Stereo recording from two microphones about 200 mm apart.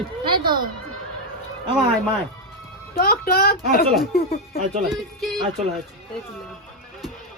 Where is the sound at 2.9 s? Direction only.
50° left (ahead or behind).